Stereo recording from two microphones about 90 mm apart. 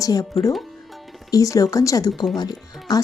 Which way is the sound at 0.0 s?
40° left (ahead or behind).